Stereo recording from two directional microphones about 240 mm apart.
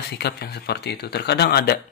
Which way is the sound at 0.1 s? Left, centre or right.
Left.